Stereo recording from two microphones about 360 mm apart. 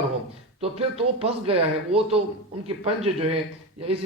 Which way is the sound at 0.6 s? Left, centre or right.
Centre.